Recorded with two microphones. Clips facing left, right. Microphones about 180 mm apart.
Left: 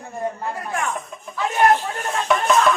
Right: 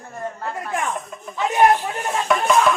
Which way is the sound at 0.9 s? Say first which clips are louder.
Even; centre (ahead or behind).